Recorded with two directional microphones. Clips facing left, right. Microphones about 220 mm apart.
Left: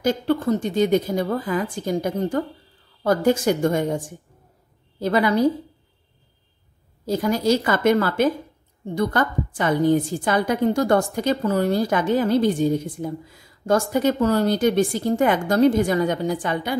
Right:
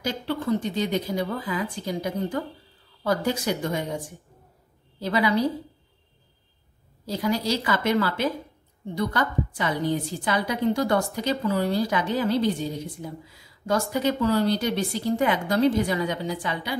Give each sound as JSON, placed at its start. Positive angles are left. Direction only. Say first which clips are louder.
{"t": 0.0, "sound": "a woman's voice", "louder": "left 7 dB", "side_deg": 50}
{"t": 7.1, "sound": "a woman's voice", "louder": "left 6 dB", "side_deg": 45}